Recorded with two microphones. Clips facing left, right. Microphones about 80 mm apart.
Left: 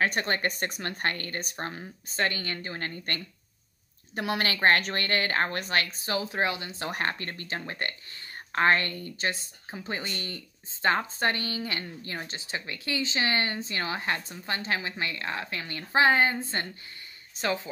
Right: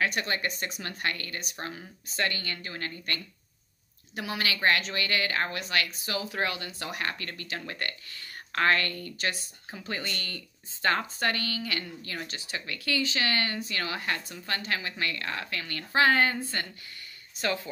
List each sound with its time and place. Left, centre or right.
0.0 s a woman's voice: left
4.1 s a woman's voice: left
6.9 s a woman's voice: left